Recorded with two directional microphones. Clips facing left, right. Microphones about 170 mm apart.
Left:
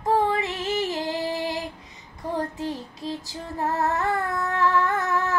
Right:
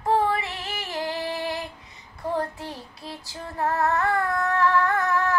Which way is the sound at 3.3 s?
20° left (ahead or behind).